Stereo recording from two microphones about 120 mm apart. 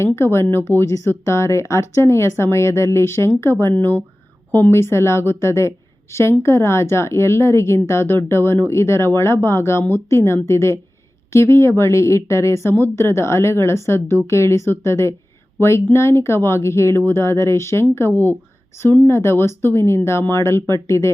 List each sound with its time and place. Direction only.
0.0 s speech: 20° left (ahead or behind)